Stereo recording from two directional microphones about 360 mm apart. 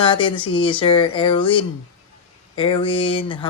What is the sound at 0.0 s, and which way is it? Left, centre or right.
Speech, centre.